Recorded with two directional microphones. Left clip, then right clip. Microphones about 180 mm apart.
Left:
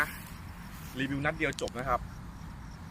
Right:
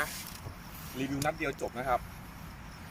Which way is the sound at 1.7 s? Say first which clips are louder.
Even; 15° left (ahead or behind).